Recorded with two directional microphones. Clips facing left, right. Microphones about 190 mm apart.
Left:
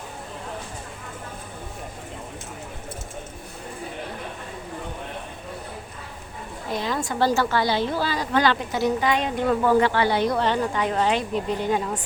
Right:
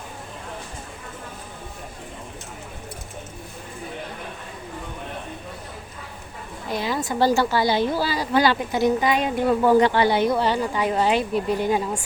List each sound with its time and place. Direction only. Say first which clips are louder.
6.7 s a woman's voice: right 1 dB; 5° right (ahead or behind)